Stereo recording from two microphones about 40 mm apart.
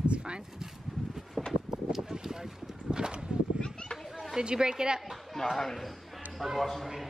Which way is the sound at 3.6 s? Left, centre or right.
Centre.